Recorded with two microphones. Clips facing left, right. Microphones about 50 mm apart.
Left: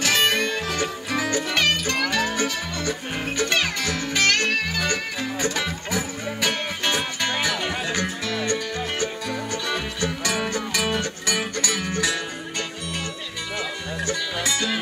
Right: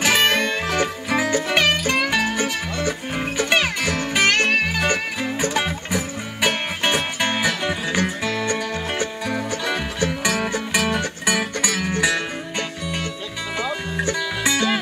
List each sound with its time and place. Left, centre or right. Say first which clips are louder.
0.0 s music: right 3 dB; right
13.9 s music: right 1 dB; right